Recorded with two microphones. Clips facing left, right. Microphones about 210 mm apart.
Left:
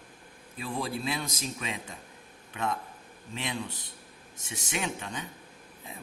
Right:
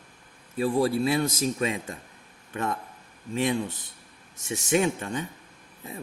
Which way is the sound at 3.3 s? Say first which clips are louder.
Right 9 dB; 45° right (ahead or behind).